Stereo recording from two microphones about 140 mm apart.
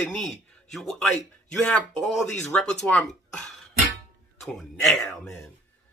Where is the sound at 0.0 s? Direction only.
5° left (ahead or behind).